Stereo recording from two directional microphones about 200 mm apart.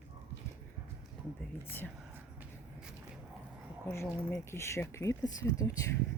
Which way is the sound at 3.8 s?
10° left (ahead or behind).